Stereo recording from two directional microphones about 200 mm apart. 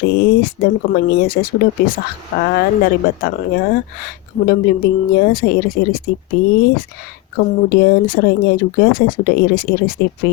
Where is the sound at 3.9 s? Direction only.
50° left (ahead or behind).